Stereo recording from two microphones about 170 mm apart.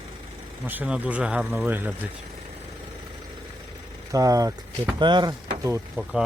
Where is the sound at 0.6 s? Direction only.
10° right (ahead or behind).